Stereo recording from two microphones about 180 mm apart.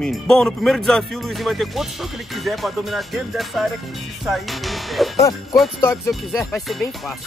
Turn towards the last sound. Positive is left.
turn(degrees=0)  # may be behind; listen again after turning